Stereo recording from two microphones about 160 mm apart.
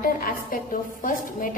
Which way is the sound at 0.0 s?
65° left (ahead or behind).